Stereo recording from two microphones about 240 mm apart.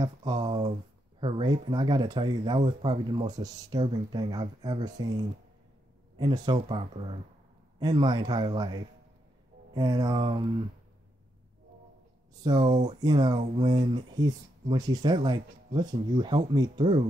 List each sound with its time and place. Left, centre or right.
0.0 s speech: centre
6.1 s speech: centre
12.4 s speech: centre